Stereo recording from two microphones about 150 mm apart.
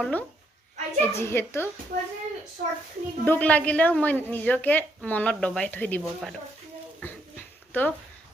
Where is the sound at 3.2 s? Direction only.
10° left (ahead or behind).